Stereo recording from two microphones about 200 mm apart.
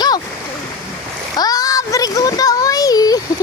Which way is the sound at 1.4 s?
20° left (ahead or behind).